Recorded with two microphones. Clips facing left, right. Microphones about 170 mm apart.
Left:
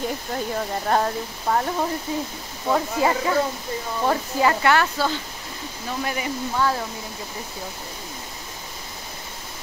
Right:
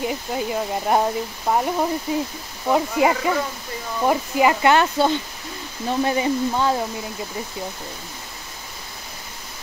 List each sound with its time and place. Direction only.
0.0 s speech: 10° right (ahead or behind)